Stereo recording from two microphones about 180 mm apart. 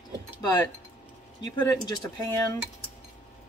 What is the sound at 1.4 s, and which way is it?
Speech, 15° left (ahead or behind).